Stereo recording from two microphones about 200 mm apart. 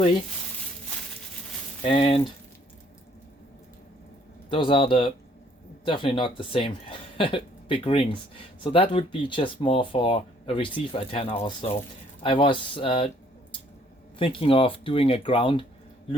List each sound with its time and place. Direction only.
1.8 s speech: 30° left (ahead or behind)
4.4 s speech: 25° left (ahead or behind)
14.2 s speech: 25° left (ahead or behind)